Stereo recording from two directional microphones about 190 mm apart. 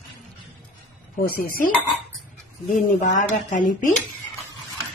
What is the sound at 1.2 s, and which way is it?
Speech, 50° left (ahead or behind).